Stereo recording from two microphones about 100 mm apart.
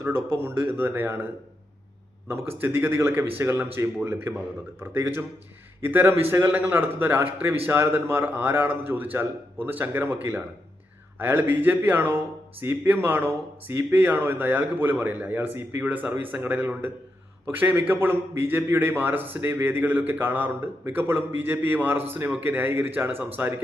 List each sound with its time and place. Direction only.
0.0 s a man's voice: 25° right (ahead or behind)
2.3 s a man's voice: 25° right (ahead or behind)